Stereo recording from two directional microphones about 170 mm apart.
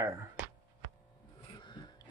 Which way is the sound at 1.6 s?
25° left (ahead or behind).